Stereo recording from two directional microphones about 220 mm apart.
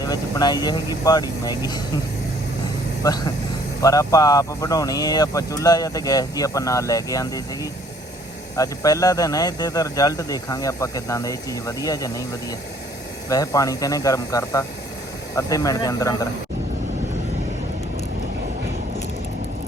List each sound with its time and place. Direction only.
0.0 s speech: 15° left (ahead or behind)
3.0 s speech: 15° left (ahead or behind)